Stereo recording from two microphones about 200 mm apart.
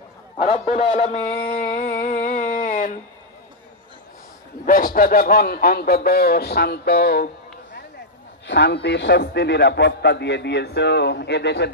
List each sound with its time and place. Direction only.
0.4 s a sound: 30° left (ahead or behind)
4.6 s speech: 45° left (ahead or behind)
8.5 s a man's voice: 60° left (ahead or behind)